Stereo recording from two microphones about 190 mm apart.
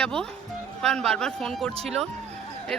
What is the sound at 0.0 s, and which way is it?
Speech, 5° left (ahead or behind).